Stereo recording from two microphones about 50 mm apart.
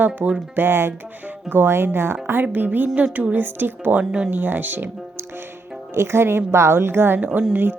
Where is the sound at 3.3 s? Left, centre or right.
Right.